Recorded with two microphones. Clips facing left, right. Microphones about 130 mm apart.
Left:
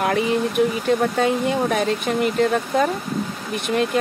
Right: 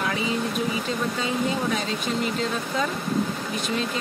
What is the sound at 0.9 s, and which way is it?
Speech, 55° left (ahead or behind).